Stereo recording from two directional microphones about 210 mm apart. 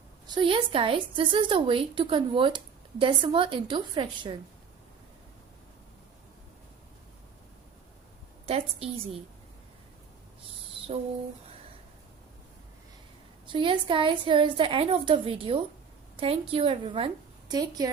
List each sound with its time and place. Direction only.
0.3 s a woman's voice: 25° right (ahead or behind)
8.4 s a woman's voice: 30° right (ahead or behind)
10.8 s a sound: 25° right (ahead or behind)
13.5 s a woman's voice: 25° right (ahead or behind)